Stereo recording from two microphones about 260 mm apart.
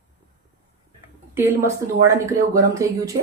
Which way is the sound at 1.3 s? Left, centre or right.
Centre.